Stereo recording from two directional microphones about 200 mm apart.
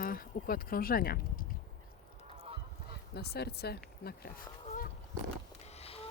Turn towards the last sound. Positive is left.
turn(degrees=30)  # may be behind; listen again after turning